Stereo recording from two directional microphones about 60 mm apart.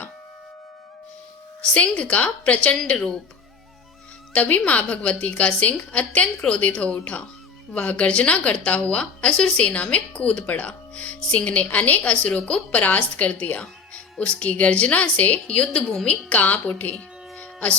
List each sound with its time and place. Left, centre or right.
1.7 s a woman's voice: left
4.4 s a woman's voice: left
16.0 s a woman's voice: left
16.9 s a sound: left